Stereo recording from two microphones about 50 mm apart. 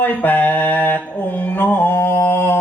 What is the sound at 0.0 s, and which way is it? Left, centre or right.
Music, left.